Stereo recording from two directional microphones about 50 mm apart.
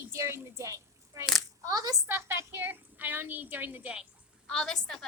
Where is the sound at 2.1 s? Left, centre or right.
Right.